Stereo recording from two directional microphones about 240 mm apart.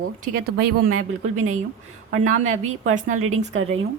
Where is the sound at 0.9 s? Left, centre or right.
Right.